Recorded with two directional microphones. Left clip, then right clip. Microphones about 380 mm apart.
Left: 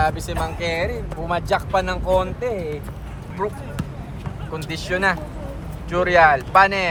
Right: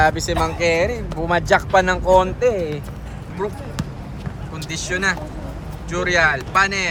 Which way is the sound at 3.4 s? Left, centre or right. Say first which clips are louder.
Even; centre.